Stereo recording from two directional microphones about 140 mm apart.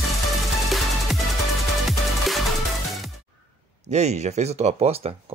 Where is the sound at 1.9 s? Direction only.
Centre (ahead or behind).